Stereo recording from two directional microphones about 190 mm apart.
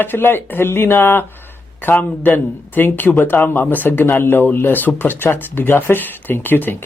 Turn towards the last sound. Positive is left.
turn(degrees=10)  # may be behind; listen again after turning